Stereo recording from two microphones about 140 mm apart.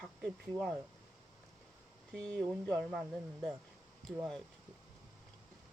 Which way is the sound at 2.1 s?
5° left (ahead or behind).